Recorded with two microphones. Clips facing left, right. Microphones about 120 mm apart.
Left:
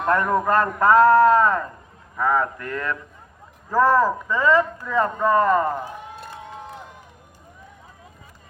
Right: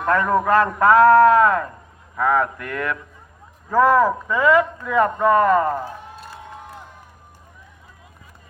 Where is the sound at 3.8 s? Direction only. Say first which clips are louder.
Right 2 dB; 15° right (ahead or behind).